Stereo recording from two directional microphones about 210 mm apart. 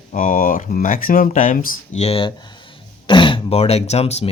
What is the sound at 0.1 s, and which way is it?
Speech, 40° left (ahead or behind).